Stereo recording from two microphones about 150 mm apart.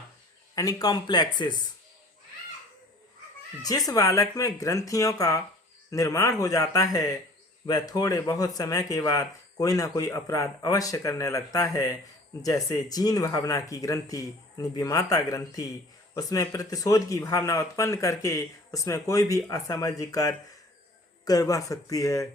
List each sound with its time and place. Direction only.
0.5 s speech: 25° left (ahead or behind)
3.6 s speech: 25° left (ahead or behind)